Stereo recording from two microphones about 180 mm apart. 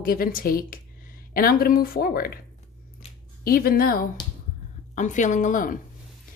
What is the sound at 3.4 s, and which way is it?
A woman's voice, 55° left (ahead or behind).